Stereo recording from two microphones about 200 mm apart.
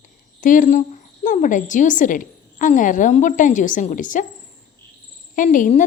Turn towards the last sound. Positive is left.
turn(degrees=40)  # may be behind; listen again after turning